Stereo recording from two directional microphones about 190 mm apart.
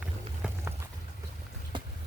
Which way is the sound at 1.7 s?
25° right (ahead or behind).